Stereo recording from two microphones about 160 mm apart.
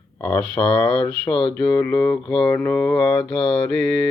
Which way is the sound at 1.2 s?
30° left (ahead or behind).